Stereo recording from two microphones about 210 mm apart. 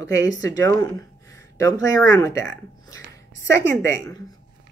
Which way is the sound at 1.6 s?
15° left (ahead or behind).